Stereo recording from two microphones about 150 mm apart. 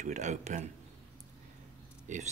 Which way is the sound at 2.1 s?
55° right (ahead or behind).